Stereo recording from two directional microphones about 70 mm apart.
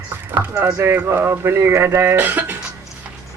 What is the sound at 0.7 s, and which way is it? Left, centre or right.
Speech, right.